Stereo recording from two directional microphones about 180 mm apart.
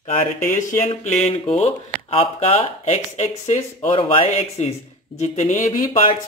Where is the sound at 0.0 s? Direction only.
45° left (ahead or behind).